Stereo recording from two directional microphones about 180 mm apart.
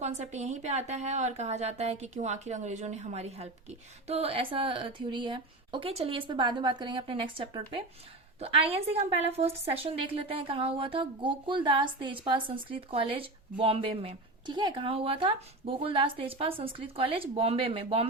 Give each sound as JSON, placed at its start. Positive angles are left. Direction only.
{"t": 0.0, "sound": "a woman's voice", "side_deg": -40}